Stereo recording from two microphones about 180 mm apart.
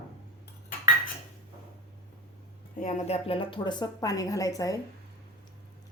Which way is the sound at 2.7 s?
45° left (ahead or behind).